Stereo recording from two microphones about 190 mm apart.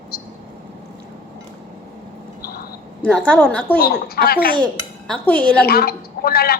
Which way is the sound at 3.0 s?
5° left (ahead or behind).